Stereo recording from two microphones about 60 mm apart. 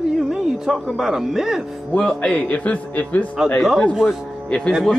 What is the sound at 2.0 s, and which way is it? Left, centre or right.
Speech, centre.